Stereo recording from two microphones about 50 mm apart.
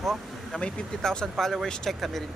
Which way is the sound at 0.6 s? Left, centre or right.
Left.